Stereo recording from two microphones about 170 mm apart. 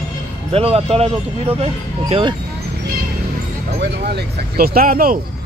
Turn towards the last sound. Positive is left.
turn(degrees=-60)  # may be behind; listen again after turning